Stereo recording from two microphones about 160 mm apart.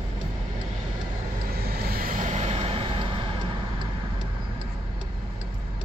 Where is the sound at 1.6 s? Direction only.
75° right (ahead or behind); by 3.3 s 35° right (ahead or behind).